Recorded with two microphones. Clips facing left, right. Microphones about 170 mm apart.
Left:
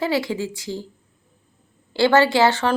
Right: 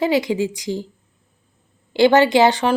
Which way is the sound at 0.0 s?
15° right (ahead or behind).